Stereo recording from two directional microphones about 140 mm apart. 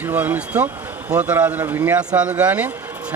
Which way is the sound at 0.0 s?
15° right (ahead or behind).